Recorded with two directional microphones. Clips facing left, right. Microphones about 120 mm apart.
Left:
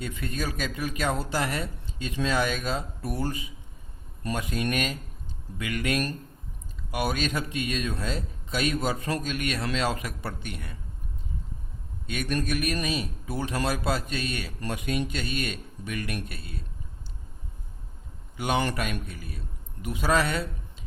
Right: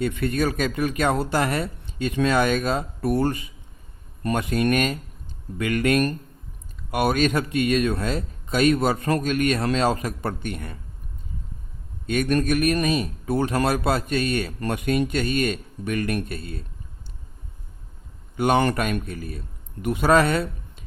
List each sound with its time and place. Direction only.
0.0 s a man's voice: 65° right (ahead or behind); by 10.8 s 50° right (ahead or behind)
12.0 s a man's voice: 50° right (ahead or behind)
18.3 s a man's voice: 50° right (ahead or behind)